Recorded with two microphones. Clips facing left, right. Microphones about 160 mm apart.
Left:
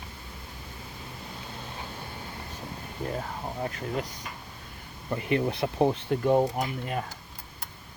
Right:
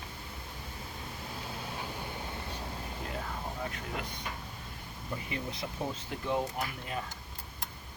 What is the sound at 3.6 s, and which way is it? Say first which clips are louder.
Speech: left 6 dB; 40° left (ahead or behind).